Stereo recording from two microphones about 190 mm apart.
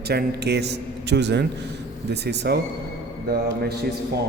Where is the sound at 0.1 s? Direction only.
60° right (ahead or behind).